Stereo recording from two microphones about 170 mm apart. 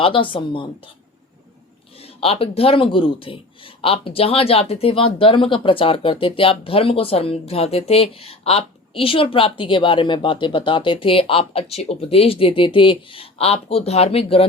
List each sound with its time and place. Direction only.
0.0 s a woman's voice: 30° left (ahead or behind)
2.0 s speech: 35° left (ahead or behind)